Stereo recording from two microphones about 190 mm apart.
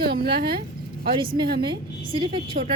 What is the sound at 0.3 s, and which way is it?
Speech, 55° right (ahead or behind).